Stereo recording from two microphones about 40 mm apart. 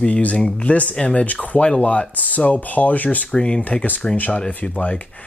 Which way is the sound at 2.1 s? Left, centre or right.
Left.